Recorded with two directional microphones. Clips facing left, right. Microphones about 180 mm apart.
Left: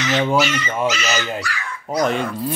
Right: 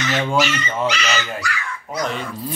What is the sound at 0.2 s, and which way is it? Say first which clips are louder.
Speech: left 1 dB; 5° left (ahead or behind).